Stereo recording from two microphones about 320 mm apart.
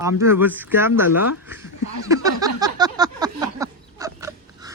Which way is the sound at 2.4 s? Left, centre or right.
Centre.